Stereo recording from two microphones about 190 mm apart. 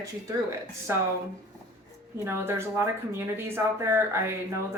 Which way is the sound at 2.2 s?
10° right (ahead or behind).